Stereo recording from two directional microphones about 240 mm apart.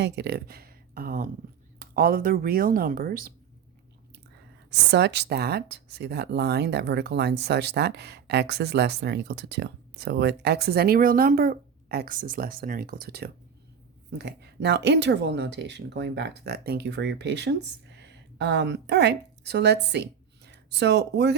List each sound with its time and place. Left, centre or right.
0.0 s speech: right
4.7 s speech: right